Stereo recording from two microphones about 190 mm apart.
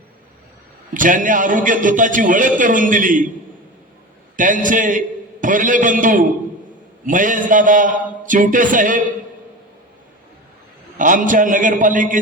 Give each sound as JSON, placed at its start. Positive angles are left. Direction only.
{"t": 0.9, "sound": "a man's voice", "side_deg": -45}
{"t": 4.4, "sound": "a man's voice", "side_deg": -45}
{"t": 10.9, "sound": "a man's voice", "side_deg": -45}